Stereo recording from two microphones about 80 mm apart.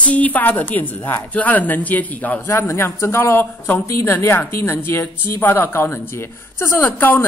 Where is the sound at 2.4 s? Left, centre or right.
Left.